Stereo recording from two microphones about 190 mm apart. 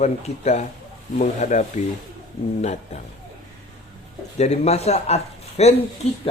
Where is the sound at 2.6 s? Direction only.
35° left (ahead or behind).